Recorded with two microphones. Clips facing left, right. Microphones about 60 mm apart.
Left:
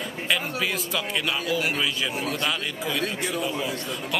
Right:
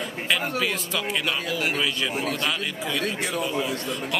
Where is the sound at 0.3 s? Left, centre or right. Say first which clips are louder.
Right 1 dB; centre.